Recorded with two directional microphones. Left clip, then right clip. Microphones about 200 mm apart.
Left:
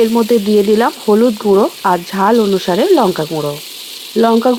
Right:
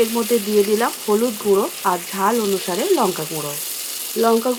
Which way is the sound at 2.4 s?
45° left (ahead or behind).